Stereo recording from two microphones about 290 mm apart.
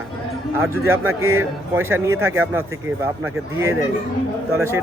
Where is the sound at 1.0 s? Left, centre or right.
Right.